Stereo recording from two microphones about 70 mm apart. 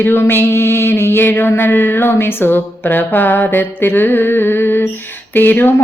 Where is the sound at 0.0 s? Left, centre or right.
Left.